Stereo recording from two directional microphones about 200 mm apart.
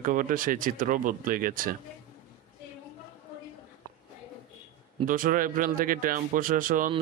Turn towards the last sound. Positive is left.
turn(degrees=-40)  # may be behind; listen again after turning